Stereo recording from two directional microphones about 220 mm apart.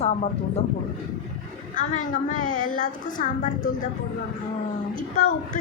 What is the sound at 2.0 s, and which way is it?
A woman's voice, 35° left (ahead or behind).